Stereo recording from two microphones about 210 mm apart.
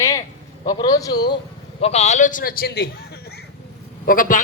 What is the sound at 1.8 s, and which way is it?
A man's voice, 30° left (ahead or behind).